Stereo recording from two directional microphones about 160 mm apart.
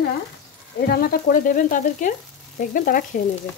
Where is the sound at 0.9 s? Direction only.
70° left (ahead or behind).